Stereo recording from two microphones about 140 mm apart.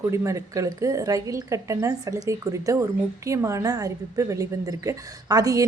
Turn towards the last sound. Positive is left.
turn(degrees=-25)  # may be behind; listen again after turning